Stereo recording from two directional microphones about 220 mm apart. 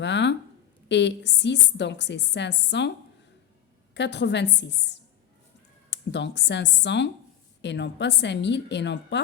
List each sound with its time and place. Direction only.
0.0 s a woman's voice: 55° left (ahead or behind)
3.9 s a woman's voice: 55° left (ahead or behind)
5.9 s a woman's voice: 55° left (ahead or behind)